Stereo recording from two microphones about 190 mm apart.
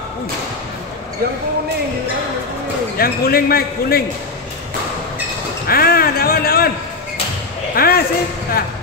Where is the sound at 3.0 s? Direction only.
50° left (ahead or behind).